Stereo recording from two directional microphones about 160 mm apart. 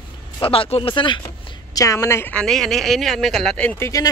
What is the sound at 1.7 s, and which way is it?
Speech, 20° left (ahead or behind).